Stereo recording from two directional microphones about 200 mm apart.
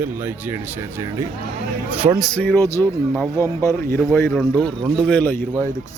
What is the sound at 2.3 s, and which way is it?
A man's voice, 10° left (ahead or behind).